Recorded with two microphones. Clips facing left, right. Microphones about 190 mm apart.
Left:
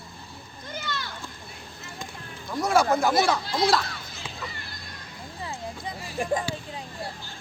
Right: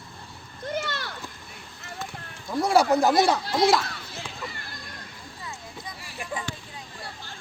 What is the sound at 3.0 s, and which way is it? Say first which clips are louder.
Speech: right 2 dB; 20° right (ahead or behind).